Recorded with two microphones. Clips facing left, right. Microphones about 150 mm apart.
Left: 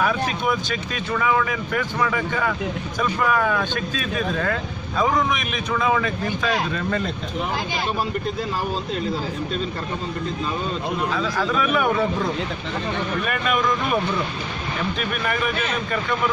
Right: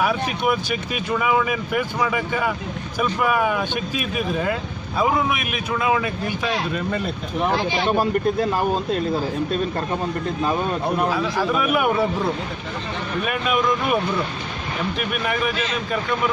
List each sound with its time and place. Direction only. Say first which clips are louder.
0.0 s speech: right 1 dB; 10° right (ahead or behind)
7.8 s speech: right 6 dB; 60° right (ahead or behind)
11.1 s speech: right 2 dB; 10° right (ahead or behind)
13.2 s speech: right 3 dB; 5° right (ahead or behind)